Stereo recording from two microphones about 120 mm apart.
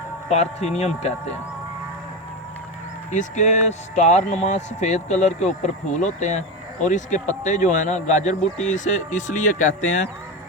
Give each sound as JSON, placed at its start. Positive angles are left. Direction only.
{"t": 0.3, "sound": "speech", "side_deg": 65}
{"t": 3.1, "sound": "a man's voice", "side_deg": 85}